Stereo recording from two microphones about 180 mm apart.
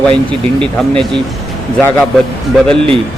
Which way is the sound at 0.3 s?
5° left (ahead or behind).